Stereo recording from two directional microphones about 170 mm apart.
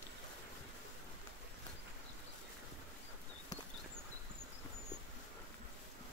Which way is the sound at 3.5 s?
20° left (ahead or behind).